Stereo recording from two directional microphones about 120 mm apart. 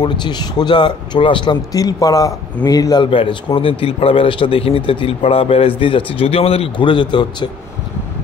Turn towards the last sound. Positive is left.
turn(degrees=40)  # may be behind; listen again after turning